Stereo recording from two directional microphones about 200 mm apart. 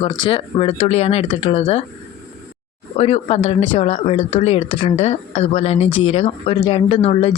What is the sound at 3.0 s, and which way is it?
Speech, 30° left (ahead or behind).